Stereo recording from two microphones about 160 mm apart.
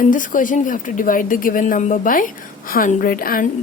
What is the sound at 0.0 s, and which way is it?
A woman's voice, 55° left (ahead or behind).